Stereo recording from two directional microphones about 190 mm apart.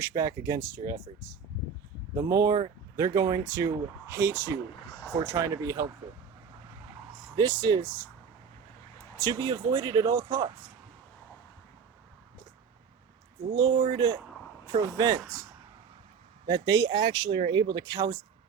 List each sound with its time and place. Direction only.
0.0 s speech: 15° right (ahead or behind)
2.1 s speech: 15° right (ahead or behind)
7.3 s speech: 15° right (ahead or behind)
9.1 s speech: 20° right (ahead or behind)
13.6 s speech: 25° right (ahead or behind)
16.5 s speech: 20° right (ahead or behind)